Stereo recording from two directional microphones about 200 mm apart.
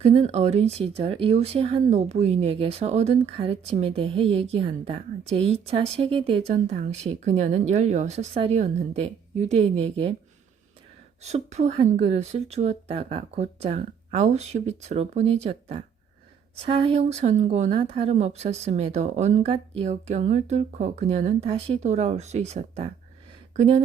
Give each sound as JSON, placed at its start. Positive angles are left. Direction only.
{"t": 0.0, "sound": "speech", "side_deg": -30}
{"t": 11.2, "sound": "speech", "side_deg": -35}